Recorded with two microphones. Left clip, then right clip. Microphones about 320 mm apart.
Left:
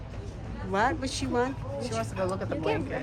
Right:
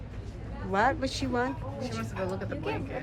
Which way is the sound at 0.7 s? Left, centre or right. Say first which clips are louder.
Right 1 dB; centre.